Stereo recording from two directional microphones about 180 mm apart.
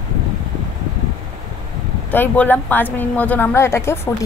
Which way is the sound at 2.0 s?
10° left (ahead or behind).